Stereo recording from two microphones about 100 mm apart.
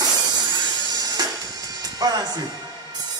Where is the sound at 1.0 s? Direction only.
40° right (ahead or behind).